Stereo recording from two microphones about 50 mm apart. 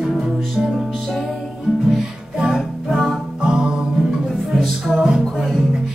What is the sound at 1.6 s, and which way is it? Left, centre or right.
Music, centre.